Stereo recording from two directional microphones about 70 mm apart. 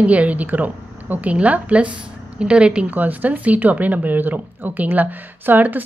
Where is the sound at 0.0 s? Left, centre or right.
Right.